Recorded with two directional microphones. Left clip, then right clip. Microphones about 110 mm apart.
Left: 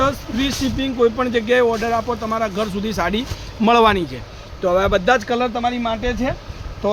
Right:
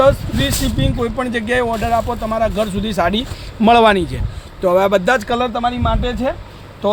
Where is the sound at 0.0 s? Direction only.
75° right (ahead or behind).